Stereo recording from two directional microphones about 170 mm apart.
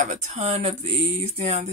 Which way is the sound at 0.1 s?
45° right (ahead or behind).